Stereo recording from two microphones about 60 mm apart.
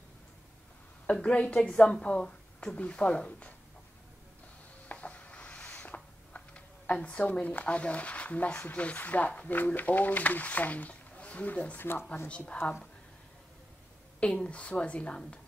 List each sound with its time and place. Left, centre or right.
1.0 s speech: centre
4.9 s a sound: left
6.3 s speech: left
14.2 s speech: centre